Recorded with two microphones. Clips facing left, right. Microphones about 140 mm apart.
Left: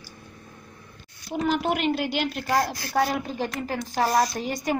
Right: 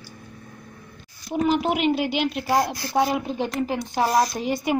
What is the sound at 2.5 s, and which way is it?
Speech, 20° right (ahead or behind).